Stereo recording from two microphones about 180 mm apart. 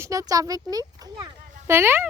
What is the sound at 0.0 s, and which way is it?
Speech, 20° right (ahead or behind).